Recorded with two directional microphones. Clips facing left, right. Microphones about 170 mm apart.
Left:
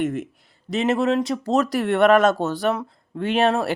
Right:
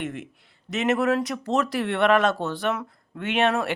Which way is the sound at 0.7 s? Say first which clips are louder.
Left 2 dB; 30° left (ahead or behind).